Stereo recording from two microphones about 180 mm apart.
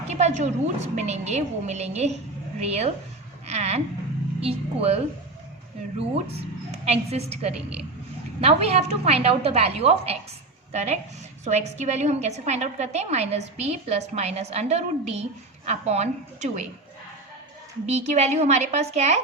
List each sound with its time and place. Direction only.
0.1 s a woman's voice: 40° right (ahead or behind)
3.4 s a sound: 35° right (ahead or behind)
4.4 s a woman's voice: 35° right (ahead or behind)
6.3 s a woman's voice: 35° right (ahead or behind)
17.8 s a woman's voice: 40° right (ahead or behind)